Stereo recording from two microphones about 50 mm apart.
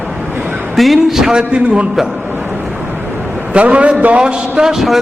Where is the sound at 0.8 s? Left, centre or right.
Centre.